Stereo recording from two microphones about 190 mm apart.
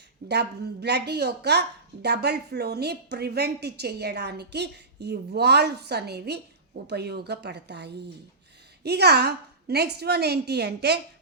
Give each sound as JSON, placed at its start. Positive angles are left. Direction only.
{"t": 0.3, "sound": "a woman's voice", "side_deg": -60}